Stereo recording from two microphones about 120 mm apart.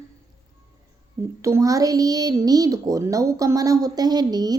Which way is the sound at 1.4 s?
25° right (ahead or behind).